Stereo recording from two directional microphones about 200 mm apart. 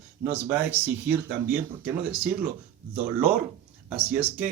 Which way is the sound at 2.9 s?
10° right (ahead or behind).